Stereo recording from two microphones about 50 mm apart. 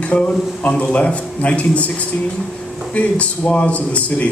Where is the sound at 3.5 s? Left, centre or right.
Left.